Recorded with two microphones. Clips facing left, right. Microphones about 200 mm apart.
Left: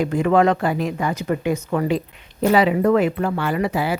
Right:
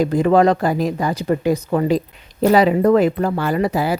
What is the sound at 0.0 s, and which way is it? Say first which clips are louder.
Speech: right 3 dB; 35° right (ahead or behind).